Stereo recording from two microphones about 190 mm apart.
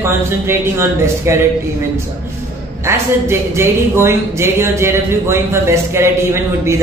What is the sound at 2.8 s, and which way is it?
Speech, 15° right (ahead or behind).